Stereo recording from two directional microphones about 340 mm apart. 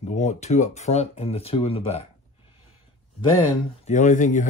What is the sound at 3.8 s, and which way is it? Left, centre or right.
Speech, left.